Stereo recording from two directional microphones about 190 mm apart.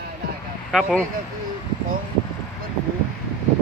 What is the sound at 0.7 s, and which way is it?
Speech, centre (ahead or behind).